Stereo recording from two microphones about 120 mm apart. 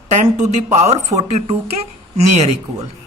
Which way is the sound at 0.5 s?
70° right (ahead or behind).